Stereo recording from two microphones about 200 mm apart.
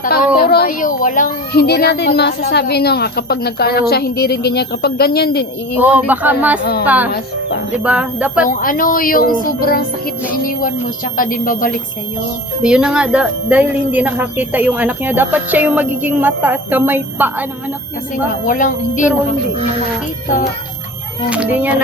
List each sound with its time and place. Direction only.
0.3 s a woman's voice: 50° left (ahead or behind)
5.8 s a woman's voice: 10° right (ahead or behind)
8.4 s a woman's voice: 45° left (ahead or behind)
12.6 s a woman's voice: 5° right (ahead or behind)
18.4 s a woman's voice: 40° left (ahead or behind)
21.2 s a woman's voice: 5° right (ahead or behind)